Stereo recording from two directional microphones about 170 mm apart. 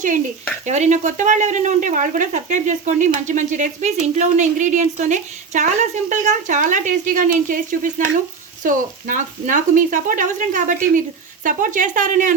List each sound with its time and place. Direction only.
0.6 s speech: 45° right (ahead or behind)